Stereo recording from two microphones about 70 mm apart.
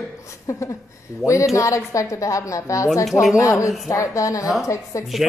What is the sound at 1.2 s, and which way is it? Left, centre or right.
Speech, centre.